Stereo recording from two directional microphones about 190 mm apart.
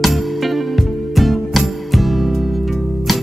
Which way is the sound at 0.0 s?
Centre (ahead or behind).